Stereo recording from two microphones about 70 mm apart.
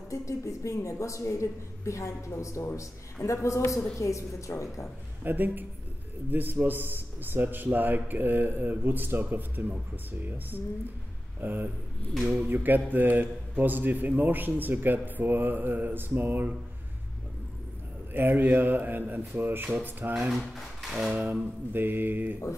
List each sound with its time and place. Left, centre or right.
0.1 s a woman's voice: left
5.2 s a man's voice: right
12.1 s speech: centre
12.4 s a man's voice: right
18.1 s a man's voice: right
20.2 s speech: centre
21.1 s a man's voice: centre